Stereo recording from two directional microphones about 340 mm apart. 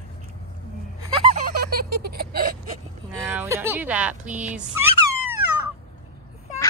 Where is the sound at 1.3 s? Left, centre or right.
Right.